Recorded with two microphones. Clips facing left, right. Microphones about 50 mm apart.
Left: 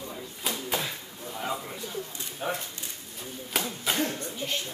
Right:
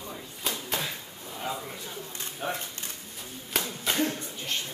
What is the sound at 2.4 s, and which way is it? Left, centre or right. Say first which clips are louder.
Speech: left 1 dB; centre.